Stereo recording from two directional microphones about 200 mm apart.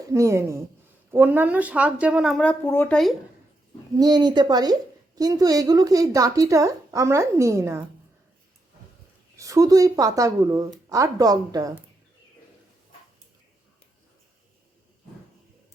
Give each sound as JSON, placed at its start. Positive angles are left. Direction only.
{"t": 0.1, "sound": "a woman's voice", "side_deg": -15}
{"t": 3.9, "sound": "a woman's voice", "side_deg": -20}
{"t": 9.4, "sound": "a woman's voice", "side_deg": -15}